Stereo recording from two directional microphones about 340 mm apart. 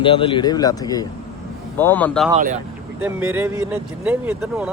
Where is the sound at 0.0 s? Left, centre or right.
Centre.